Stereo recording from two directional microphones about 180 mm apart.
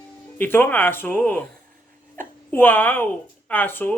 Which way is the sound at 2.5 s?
10° left (ahead or behind).